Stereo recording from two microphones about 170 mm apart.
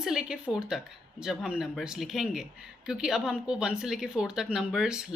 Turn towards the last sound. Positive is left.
turn(degrees=-5)  # may be behind; listen again after turning